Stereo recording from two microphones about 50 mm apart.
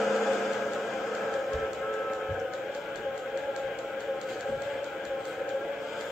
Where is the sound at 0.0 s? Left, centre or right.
Centre.